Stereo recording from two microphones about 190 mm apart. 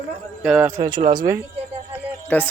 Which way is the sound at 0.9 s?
45° right (ahead or behind).